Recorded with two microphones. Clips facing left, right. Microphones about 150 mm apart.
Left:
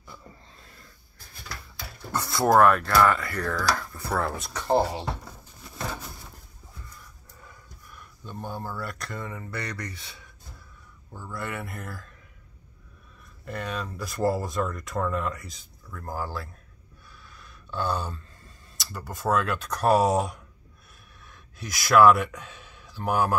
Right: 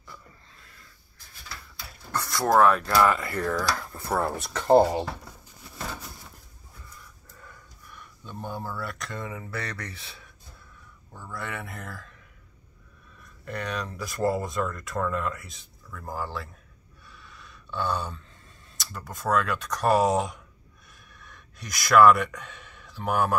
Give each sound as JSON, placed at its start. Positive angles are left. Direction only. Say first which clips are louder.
{"t": 2.1, "sound": "speech", "louder": "left 2 dB", "side_deg": 10}
{"t": 3.2, "sound": "speech", "louder": "right 2 dB", "side_deg": -25}
{"t": 4.4, "sound": "speech", "louder": "right 7 dB", "side_deg": -50}
{"t": 7.4, "sound": "speech", "louder": "even", "side_deg": 5}
{"t": 13.5, "sound": "speech", "louder": "even", "side_deg": 5}
{"t": 17.1, "sound": "a sound", "louder": "right 1 dB", "side_deg": 0}
{"t": 18.8, "sound": "speech", "louder": "left 2 dB", "side_deg": 0}